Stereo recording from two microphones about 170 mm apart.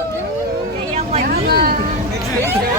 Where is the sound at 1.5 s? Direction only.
65° right (ahead or behind).